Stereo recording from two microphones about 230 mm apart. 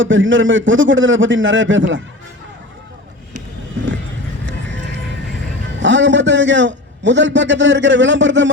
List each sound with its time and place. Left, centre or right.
0.0 s a man's voice: right
5.8 s a man's voice: right